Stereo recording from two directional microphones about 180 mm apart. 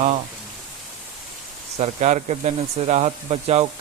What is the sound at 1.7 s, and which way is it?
Speech, 40° right (ahead or behind).